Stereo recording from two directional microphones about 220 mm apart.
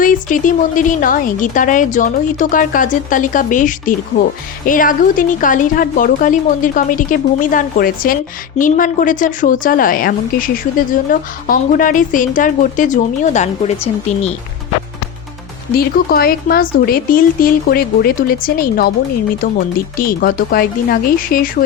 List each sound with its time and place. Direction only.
0.0 s speech: 35° left (ahead or behind)
15.7 s speech: 45° left (ahead or behind)
20.0 s speech: 40° left (ahead or behind)